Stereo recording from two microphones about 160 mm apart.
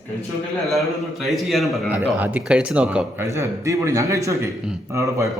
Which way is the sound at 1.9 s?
10° right (ahead or behind).